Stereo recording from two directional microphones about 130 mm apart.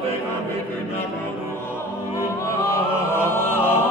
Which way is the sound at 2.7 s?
20° left (ahead or behind).